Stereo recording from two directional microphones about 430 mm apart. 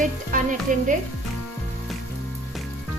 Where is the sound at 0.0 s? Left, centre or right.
Centre.